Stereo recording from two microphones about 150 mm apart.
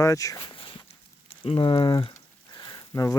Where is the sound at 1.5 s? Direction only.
35° left (ahead or behind).